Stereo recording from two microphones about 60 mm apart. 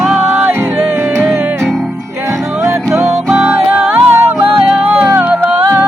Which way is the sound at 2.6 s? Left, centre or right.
Right.